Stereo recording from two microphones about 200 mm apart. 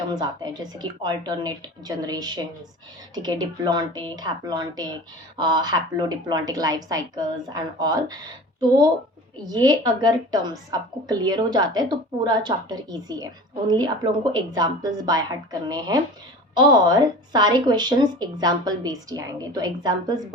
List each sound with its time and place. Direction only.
0.1 s a woman's voice: 20° right (ahead or behind)
9.5 s a woman's voice: 20° right (ahead or behind)